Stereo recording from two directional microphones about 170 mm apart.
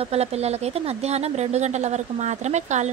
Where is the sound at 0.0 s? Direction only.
35° right (ahead or behind).